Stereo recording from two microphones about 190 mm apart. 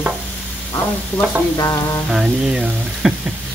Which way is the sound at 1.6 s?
20° left (ahead or behind).